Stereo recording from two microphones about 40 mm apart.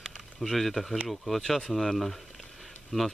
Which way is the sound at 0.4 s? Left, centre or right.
Centre.